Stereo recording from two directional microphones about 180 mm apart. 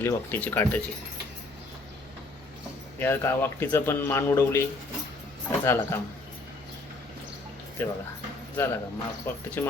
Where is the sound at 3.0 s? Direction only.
10° left (ahead or behind).